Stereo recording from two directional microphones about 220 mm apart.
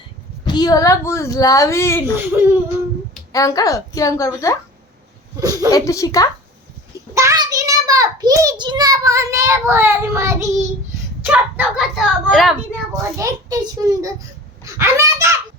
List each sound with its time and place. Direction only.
0.4 s a woman's voice: 20° left (ahead or behind)
2.1 s a child's voice: 10° right (ahead or behind)
3.3 s a woman's voice: 15° left (ahead or behind)
5.4 s a sound: 15° right (ahead or behind)
5.7 s a woman's voice: 15° left (ahead or behind)
7.1 s a sound: 15° right (ahead or behind)
11.2 s speech: 5° right (ahead or behind)
13.1 s a child's voice: 15° right (ahead or behind)
14.6 s a sound: 15° right (ahead or behind)